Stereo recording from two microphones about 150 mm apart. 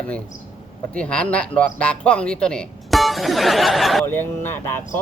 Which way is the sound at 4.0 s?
15° left (ahead or behind).